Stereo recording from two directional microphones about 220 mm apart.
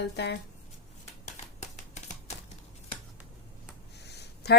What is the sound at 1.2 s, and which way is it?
Typewriter, 35° left (ahead or behind).